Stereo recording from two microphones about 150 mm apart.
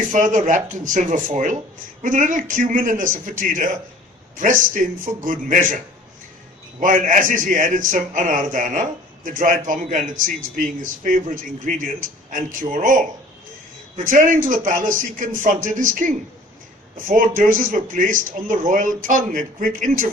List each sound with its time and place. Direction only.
0.0 s a man's voice: 55° right (ahead or behind)